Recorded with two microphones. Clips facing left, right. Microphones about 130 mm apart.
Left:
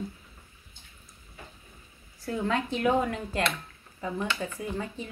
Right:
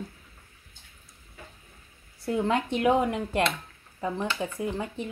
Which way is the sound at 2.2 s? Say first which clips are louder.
Right 3 dB; 15° right (ahead or behind).